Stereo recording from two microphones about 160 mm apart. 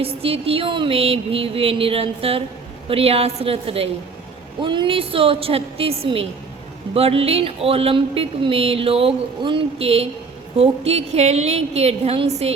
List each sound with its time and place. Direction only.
0.0 s speech: 35° right (ahead or behind)